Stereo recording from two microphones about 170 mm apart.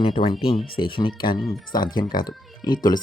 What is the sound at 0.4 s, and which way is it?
Speech, 30° left (ahead or behind).